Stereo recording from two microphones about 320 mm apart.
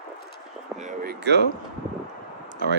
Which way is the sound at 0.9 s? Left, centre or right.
Right.